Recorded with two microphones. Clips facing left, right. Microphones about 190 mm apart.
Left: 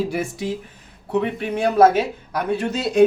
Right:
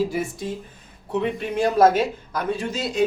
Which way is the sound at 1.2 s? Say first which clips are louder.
Left 1 dB; 60° left (ahead or behind).